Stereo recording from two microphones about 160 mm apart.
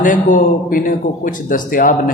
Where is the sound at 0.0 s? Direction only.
55° left (ahead or behind).